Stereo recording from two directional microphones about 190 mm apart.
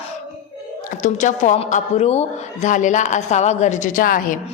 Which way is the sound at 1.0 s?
40° left (ahead or behind).